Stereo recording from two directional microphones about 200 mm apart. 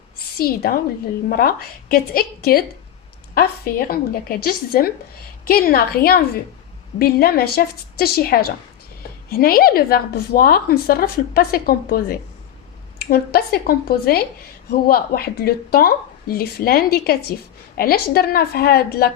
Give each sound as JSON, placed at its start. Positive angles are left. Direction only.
{"t": 0.3, "sound": "a woman's voice", "side_deg": 50}